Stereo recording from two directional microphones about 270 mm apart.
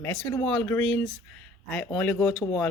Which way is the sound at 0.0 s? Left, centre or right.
Centre.